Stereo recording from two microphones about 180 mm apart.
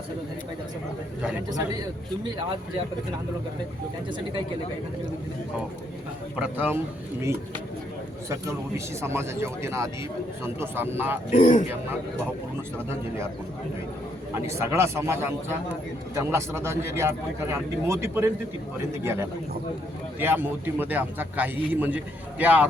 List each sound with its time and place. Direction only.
1.5 s a man's voice: 20° right (ahead or behind)
6.3 s a man's voice: 10° right (ahead or behind)
9.0 s a man's voice: 15° right (ahead or behind)
11.3 s a man's voice: 40° left (ahead or behind)
14.3 s a man's voice: 15° right (ahead or behind)